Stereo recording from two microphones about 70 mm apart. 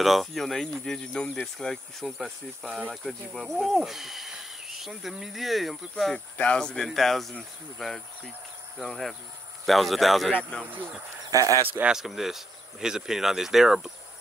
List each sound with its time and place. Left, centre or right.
0.0 s speech: centre
6.1 s speech: centre
10.5 s speech: centre
11.3 s speech: right
11.9 s speech: centre